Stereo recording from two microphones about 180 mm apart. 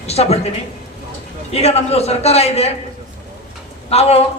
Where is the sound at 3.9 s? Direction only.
35° left (ahead or behind).